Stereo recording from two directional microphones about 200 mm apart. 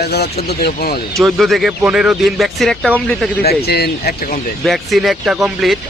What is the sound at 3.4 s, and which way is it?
Speech, 50° left (ahead or behind).